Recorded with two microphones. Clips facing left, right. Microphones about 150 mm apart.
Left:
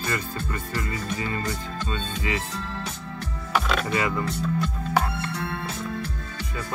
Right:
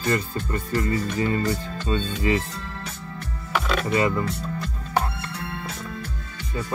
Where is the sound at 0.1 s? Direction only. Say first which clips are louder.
Right 7 dB; 35° right (ahead or behind).